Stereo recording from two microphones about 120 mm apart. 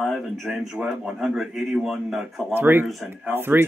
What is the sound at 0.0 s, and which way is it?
A man's voice, centre (ahead or behind).